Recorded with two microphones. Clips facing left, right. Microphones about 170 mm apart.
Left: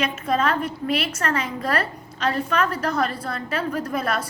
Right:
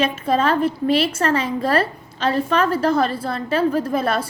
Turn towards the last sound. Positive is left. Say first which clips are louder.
# right 5 dB
turn(degrees=-30)  # may be behind; listen again after turning